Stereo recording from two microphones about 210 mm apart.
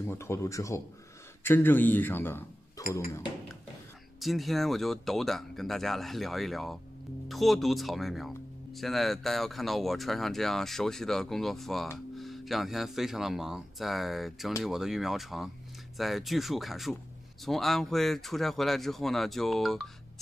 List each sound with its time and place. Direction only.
0.0 s speech: 10° left (ahead or behind)
4.2 s speech: centre (ahead or behind)